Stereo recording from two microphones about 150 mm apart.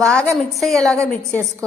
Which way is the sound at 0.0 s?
5° left (ahead or behind).